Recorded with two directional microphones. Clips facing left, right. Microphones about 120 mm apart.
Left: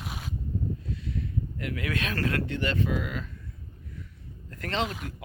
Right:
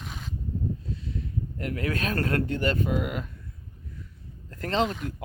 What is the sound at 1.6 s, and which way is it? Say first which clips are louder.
Speech: right 3 dB; 40° right (ahead or behind).